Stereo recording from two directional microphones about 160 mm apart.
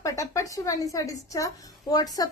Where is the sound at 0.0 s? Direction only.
20° left (ahead or behind).